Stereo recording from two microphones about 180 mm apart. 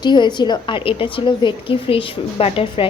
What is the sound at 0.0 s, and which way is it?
A woman's voice, 25° left (ahead or behind).